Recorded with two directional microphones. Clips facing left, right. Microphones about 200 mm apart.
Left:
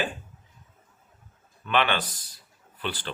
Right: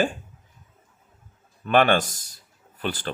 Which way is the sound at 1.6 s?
45° right (ahead or behind).